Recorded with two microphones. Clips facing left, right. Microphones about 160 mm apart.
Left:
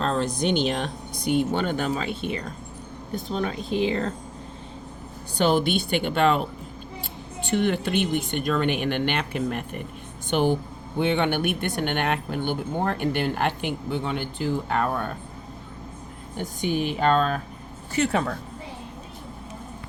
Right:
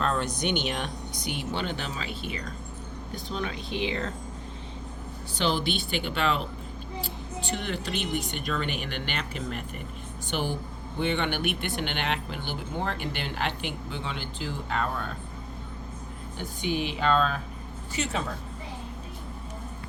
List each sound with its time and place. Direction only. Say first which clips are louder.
0.0 s a sound: left 3 dB; 35° left (ahead or behind)
0.4 s speech: left 7 dB; 35° left (ahead or behind)
1.5 s speech: left 7 dB; 45° left (ahead or behind)
3.2 s speech: left 5 dB; 40° left (ahead or behind)
5.4 s speech: left 6 dB; 50° left (ahead or behind)
16.4 s speech: left 4 dB; 45° left (ahead or behind)